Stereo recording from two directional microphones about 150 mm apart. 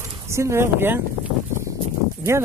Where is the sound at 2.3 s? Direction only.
20° right (ahead or behind).